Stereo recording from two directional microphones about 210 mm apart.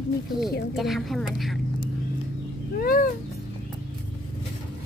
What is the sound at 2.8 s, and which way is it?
Speech, 45° left (ahead or behind).